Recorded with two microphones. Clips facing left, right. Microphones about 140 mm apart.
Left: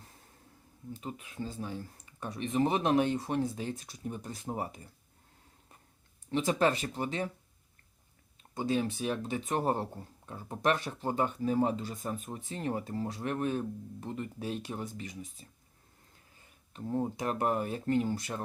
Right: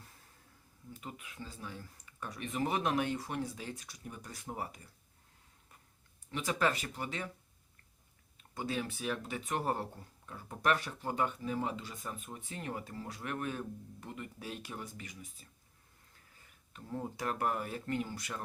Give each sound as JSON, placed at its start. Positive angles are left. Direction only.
{"t": 0.9, "sound": "speech", "side_deg": 30}
{"t": 6.3, "sound": "speech", "side_deg": 30}
{"t": 8.5, "sound": "speech", "side_deg": 25}
{"t": 16.7, "sound": "speech", "side_deg": 30}